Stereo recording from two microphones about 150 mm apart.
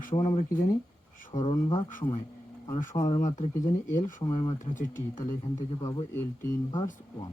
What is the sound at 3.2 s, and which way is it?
Speech, 55° left (ahead or behind).